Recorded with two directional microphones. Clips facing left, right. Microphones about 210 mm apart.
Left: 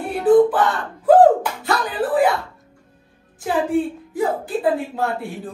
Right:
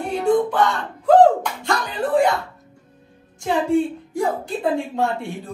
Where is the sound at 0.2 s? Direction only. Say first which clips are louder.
Left 5 dB; 5° left (ahead or behind).